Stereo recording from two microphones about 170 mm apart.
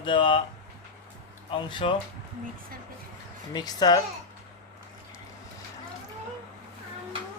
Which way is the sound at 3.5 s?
25° left (ahead or behind).